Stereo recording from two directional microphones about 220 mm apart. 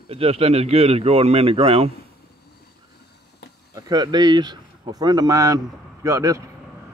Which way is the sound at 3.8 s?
15° right (ahead or behind).